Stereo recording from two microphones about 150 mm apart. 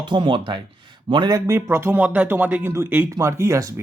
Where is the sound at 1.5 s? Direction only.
15° right (ahead or behind).